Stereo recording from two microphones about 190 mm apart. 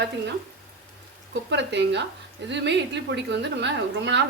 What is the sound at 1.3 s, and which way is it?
Speech, 70° right (ahead or behind).